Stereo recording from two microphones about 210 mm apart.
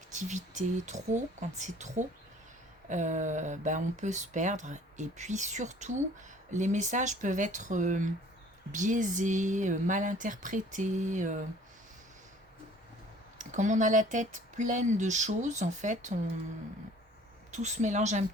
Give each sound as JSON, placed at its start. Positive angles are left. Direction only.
{"t": 0.1, "sound": "speech", "side_deg": -35}
{"t": 13.4, "sound": "speech", "side_deg": -35}
{"t": 17.5, "sound": "speech", "side_deg": -35}